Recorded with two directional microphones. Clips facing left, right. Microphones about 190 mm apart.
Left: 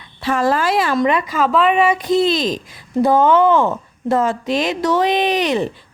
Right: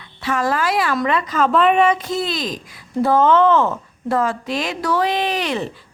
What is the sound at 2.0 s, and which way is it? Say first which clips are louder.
Speech: left 7 dB; 20° left (ahead or behind).